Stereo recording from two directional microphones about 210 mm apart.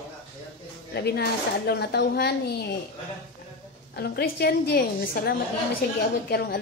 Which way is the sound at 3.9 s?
50° left (ahead or behind).